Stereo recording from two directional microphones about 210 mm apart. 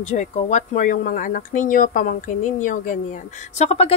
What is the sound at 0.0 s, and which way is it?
A woman's voice, 35° left (ahead or behind).